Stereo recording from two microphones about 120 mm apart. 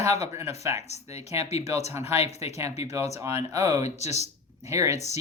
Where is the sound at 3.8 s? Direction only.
70° left (ahead or behind).